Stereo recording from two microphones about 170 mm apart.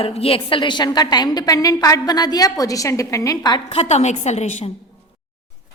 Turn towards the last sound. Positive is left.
turn(degrees=45)  # may be behind; listen again after turning